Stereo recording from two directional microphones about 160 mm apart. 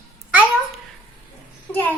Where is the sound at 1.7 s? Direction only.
10° left (ahead or behind).